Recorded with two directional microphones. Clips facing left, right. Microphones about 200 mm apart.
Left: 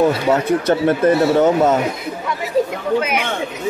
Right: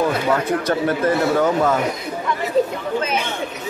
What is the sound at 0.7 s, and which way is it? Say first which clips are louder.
A man's voice: left 5 dB; 25° left (ahead or behind).